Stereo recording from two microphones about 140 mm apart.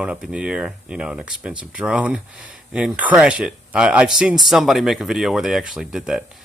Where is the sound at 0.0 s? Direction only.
5° right (ahead or behind).